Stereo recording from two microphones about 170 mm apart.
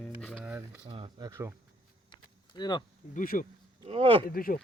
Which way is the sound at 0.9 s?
30° right (ahead or behind).